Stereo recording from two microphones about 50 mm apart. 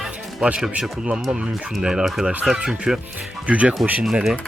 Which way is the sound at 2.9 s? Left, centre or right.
Centre.